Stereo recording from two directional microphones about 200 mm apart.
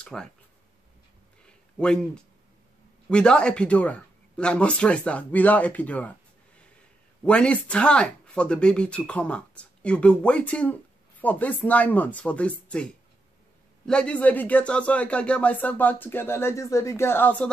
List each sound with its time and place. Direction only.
0.0 s speech: 5° left (ahead or behind)
1.4 s a sound: 5° left (ahead or behind)
3.1 s speech: 5° left (ahead or behind)
7.2 s speech: 5° left (ahead or behind)